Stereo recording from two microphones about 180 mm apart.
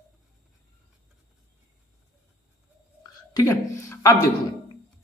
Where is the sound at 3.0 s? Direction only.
15° left (ahead or behind).